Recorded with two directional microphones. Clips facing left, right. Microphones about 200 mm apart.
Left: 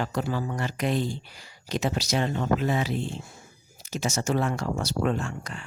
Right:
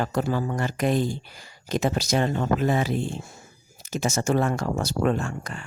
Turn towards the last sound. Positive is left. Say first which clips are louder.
# right 3 dB
turn(degrees=-45)  # may be behind; listen again after turning